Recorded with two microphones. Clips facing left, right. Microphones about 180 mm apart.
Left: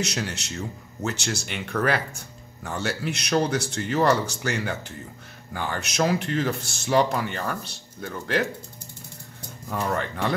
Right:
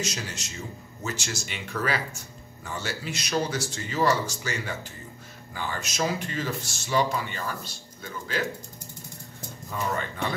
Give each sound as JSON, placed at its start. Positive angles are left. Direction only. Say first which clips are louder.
{"t": 0.0, "sound": "speech", "louder": "left 4 dB", "side_deg": 65}
{"t": 9.7, "sound": "speech", "louder": "left 3 dB", "side_deg": 55}